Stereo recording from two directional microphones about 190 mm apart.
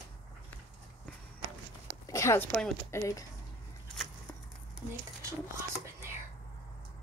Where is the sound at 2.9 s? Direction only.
15° left (ahead or behind).